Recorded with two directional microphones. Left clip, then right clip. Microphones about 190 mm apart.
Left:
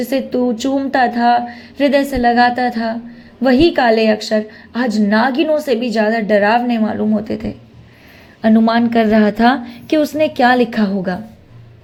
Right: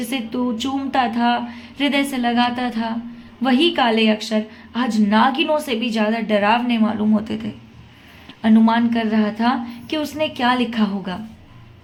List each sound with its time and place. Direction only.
0.0 s a woman's voice: 25° left (ahead or behind)